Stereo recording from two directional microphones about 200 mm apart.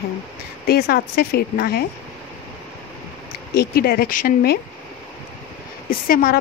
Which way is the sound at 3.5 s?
50° left (ahead or behind).